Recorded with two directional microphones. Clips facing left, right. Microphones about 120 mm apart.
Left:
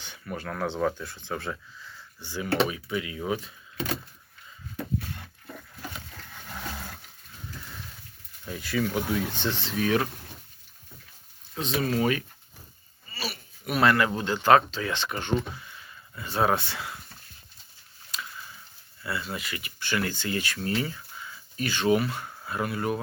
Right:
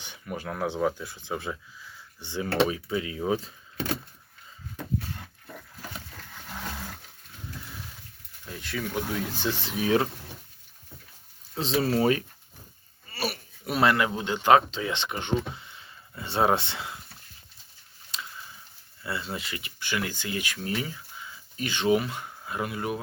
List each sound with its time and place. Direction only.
0.0 s speech: 15° right (ahead or behind)
8.4 s speech: centre (ahead or behind); by 9.9 s 15° right (ahead or behind)
11.5 s speech: 30° right (ahead or behind)
13.1 s a sound: 55° right (ahead or behind)
13.7 s speech: 25° right (ahead or behind)
18.1 s a sound: 25° right (ahead or behind)
19.0 s speech: 25° right (ahead or behind)
19.8 s speech: 15° right (ahead or behind)